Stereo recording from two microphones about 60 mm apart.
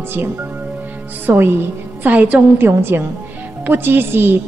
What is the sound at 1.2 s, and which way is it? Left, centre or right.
A woman's voice, right.